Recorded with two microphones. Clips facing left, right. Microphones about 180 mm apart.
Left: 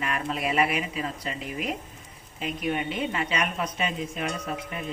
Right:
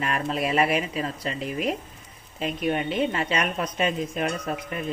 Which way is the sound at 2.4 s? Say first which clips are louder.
Right 3 dB; 35° right (ahead or behind).